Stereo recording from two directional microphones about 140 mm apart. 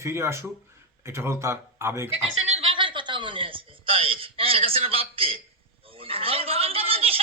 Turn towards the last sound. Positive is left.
turn(degrees=-45)  # may be behind; listen again after turning